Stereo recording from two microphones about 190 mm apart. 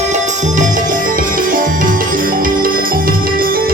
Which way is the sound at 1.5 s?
45° right (ahead or behind).